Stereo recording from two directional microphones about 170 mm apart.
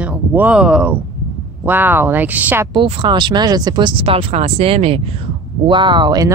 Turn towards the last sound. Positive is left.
turn(degrees=-25)  # may be behind; listen again after turning